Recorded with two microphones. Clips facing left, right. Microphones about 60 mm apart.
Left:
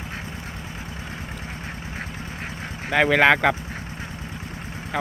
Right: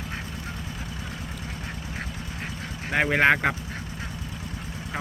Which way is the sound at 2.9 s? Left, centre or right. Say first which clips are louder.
Left 4 dB; left.